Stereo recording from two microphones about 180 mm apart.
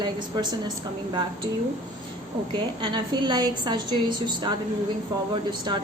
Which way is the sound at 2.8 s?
25° right (ahead or behind).